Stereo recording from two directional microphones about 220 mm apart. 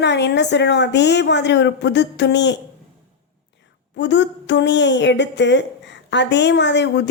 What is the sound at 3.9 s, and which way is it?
A woman's voice, 55° left (ahead or behind).